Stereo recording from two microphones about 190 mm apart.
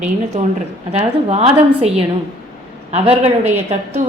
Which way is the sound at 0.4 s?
35° right (ahead or behind).